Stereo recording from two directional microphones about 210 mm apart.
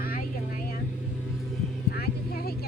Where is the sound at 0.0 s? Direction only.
45° left (ahead or behind).